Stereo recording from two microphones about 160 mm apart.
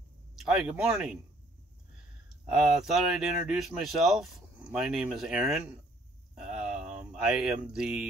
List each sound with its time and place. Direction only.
0.4 s speech: 5° right (ahead or behind)
2.4 s speech: 5° right (ahead or behind)
6.3 s a sound: 5° right (ahead or behind)